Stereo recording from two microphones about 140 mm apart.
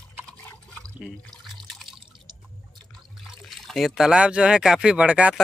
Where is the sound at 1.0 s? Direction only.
Centre (ahead or behind).